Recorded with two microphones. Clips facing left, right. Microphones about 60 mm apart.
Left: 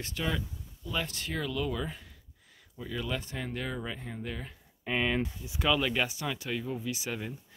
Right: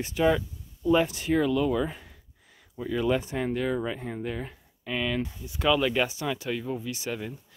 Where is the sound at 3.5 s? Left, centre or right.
Centre.